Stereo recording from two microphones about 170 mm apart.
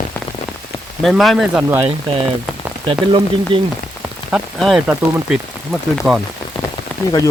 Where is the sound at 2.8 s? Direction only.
30° right (ahead or behind).